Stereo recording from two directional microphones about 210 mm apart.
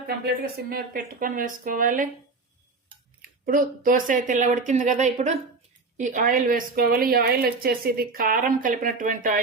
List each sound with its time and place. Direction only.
0.3 s a woman's voice: 45° right (ahead or behind)
3.2 s a woman's voice: 45° right (ahead or behind)